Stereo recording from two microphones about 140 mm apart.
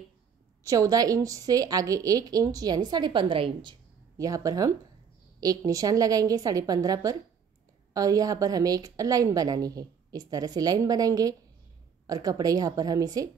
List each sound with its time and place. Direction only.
0.7 s a woman's voice: 25° right (ahead or behind)
4.2 s a woman's voice: 25° right (ahead or behind)